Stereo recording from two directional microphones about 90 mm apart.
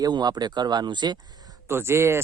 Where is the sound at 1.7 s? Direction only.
30° right (ahead or behind).